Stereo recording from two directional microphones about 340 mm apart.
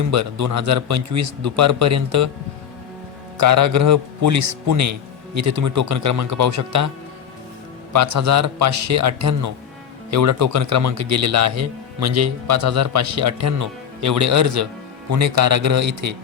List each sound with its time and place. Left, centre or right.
0.1 s speech: right
3.3 s speech: right
7.9 s speech: right